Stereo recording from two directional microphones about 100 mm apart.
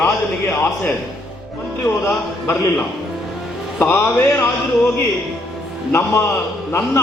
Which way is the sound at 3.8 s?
25° left (ahead or behind).